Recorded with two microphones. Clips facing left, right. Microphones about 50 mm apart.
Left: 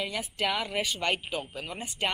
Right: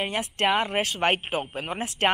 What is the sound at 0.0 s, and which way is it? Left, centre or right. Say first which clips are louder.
Speech: right 5 dB; right.